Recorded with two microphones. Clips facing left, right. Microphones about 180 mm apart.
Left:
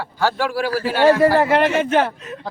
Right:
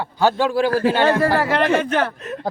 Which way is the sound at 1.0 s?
10° left (ahead or behind).